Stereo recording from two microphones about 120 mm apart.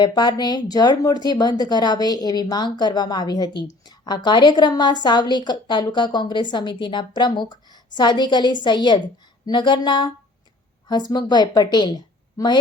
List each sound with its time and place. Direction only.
0.0 s speech: 35° left (ahead or behind)
11.1 s a woman's voice: 35° left (ahead or behind)